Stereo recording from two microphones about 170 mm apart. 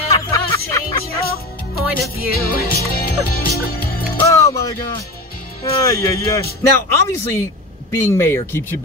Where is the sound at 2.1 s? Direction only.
60° left (ahead or behind).